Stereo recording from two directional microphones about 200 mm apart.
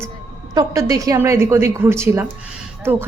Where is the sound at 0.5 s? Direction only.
15° right (ahead or behind).